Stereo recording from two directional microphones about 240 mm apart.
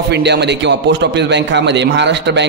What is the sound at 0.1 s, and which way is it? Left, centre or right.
A man's voice, right.